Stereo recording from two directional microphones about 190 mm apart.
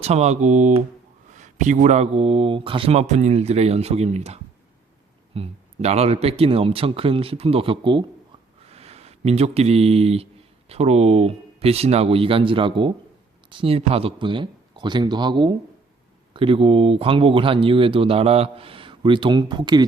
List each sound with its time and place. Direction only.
0.0 s speech: 35° right (ahead or behind)